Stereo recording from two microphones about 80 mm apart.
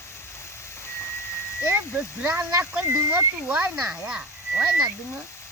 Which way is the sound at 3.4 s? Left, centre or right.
Centre.